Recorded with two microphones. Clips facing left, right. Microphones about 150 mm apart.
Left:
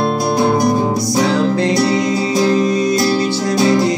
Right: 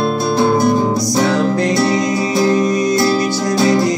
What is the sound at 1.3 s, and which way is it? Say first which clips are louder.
Music: even; 30° left (ahead or behind).